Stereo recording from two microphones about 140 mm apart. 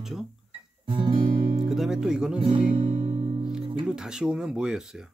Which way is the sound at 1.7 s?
5° right (ahead or behind).